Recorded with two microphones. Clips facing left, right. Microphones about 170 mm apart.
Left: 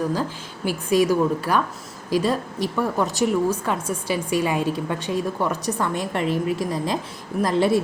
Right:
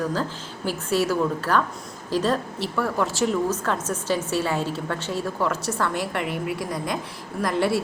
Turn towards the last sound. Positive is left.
turn(degrees=20)  # may be behind; listen again after turning